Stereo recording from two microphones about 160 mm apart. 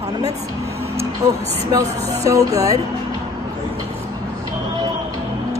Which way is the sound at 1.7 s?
20° right (ahead or behind).